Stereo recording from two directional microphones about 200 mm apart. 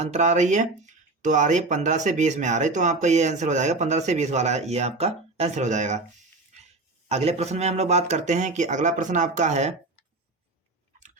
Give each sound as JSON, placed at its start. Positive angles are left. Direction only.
{"t": 0.0, "sound": "speech", "side_deg": -35}
{"t": 7.1, "sound": "speech", "side_deg": -30}